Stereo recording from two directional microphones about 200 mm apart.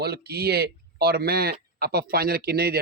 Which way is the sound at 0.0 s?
50° right (ahead or behind).